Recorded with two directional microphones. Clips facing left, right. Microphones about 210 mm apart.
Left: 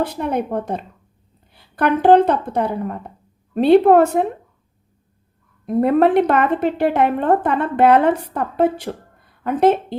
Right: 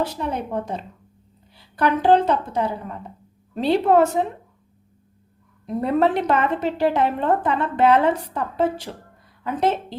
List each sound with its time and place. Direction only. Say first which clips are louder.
0.0 s a woman's voice: left 4 dB; 55° left (ahead or behind)
5.6 s a woman's voice: left 5 dB; 55° left (ahead or behind)